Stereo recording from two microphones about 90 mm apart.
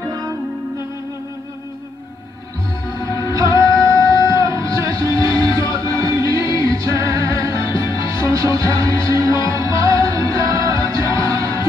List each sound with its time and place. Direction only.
0.0 s music: 45° right (ahead or behind)
3.1 s music: 45° right (ahead or behind)